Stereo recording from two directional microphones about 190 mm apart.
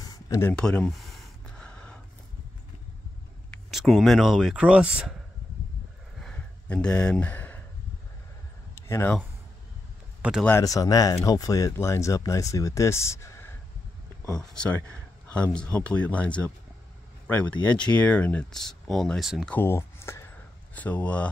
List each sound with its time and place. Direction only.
0.0 s gasp: 20° left (ahead or behind)
3.5 s speech: centre (ahead or behind)
6.1 s a sound: 5° left (ahead or behind)
8.8 s speech: 10° left (ahead or behind)
10.4 s speech: 15° left (ahead or behind)
14.4 s speech: 5° left (ahead or behind)